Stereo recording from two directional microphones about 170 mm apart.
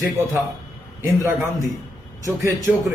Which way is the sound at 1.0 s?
15° right (ahead or behind).